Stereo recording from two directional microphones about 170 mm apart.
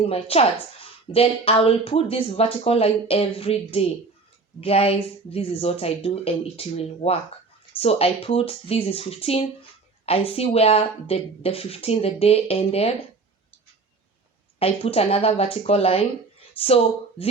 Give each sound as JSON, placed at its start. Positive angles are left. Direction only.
{"t": 0.0, "sound": "a woman's voice", "side_deg": 35}
{"t": 14.6, "sound": "a woman's voice", "side_deg": 35}